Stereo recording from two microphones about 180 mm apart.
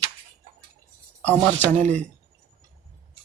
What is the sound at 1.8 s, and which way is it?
Speech, 40° right (ahead or behind).